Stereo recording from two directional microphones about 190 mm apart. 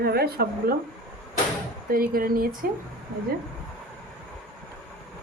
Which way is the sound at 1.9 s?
50° right (ahead or behind).